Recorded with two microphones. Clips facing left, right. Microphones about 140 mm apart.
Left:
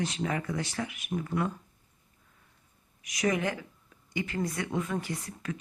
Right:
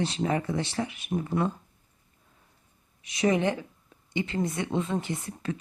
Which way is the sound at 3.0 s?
30° right (ahead or behind).